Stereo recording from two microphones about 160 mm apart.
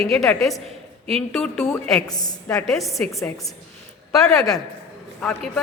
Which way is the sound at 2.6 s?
Centre (ahead or behind).